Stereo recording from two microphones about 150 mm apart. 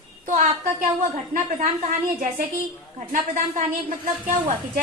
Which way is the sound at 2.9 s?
60° right (ahead or behind).